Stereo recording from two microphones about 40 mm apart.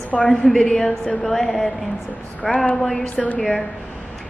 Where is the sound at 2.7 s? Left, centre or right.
Centre.